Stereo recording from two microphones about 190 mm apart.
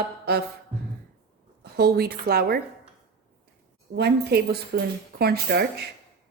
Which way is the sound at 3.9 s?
60° right (ahead or behind).